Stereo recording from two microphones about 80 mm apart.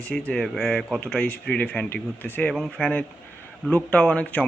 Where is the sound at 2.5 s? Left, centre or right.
Centre.